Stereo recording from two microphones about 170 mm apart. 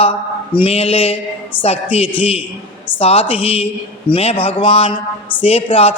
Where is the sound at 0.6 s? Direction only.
35° left (ahead or behind).